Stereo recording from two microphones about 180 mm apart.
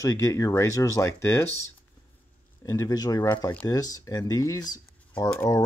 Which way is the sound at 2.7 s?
20° left (ahead or behind).